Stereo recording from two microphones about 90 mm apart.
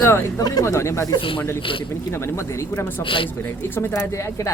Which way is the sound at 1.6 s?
75° left (ahead or behind).